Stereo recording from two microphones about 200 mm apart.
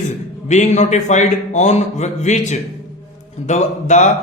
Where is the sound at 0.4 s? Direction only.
35° left (ahead or behind).